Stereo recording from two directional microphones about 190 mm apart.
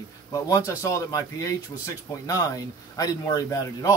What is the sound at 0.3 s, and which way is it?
A man's voice, 15° left (ahead or behind).